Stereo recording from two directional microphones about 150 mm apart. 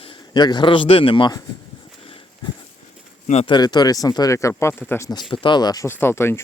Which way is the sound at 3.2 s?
45° left (ahead or behind).